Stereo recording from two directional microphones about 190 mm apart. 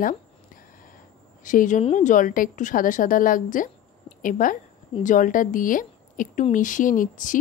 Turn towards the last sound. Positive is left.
turn(degrees=45)  # may be behind; listen again after turning